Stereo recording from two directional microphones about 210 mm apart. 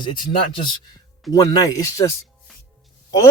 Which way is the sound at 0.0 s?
20° left (ahead or behind).